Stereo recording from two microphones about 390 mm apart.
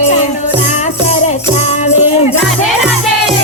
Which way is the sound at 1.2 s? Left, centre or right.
Centre.